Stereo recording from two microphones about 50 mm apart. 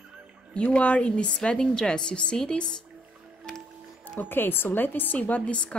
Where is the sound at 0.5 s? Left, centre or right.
Left.